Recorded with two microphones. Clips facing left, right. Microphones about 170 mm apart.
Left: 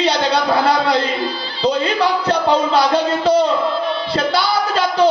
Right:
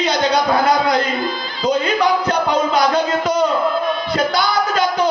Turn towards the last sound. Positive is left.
turn(degrees=30)  # may be behind; listen again after turning